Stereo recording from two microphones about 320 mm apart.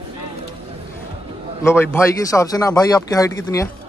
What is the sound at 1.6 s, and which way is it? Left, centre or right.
Speech, centre.